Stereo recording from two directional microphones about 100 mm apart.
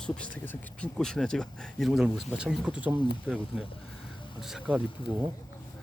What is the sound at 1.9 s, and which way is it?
Speech, 5° right (ahead or behind).